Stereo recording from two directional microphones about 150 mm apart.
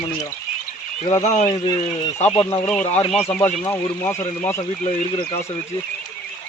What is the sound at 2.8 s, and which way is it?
Speech, 45° left (ahead or behind).